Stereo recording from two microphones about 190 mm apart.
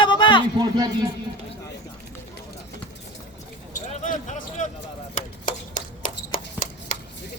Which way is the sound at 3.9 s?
40° left (ahead or behind).